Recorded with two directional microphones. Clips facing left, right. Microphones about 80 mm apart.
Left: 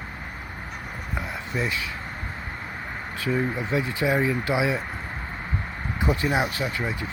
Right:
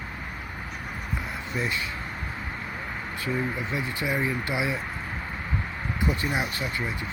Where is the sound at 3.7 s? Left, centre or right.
Left.